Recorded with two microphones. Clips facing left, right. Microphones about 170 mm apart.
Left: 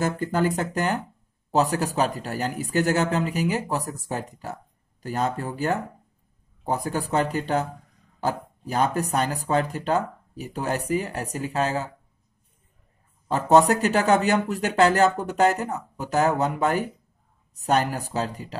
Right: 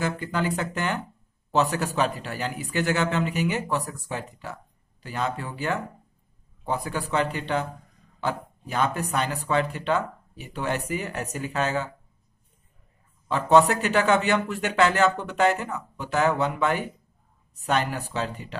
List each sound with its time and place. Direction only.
0.0 s speech: 45° left (ahead or behind)
13.3 s speech: 40° left (ahead or behind)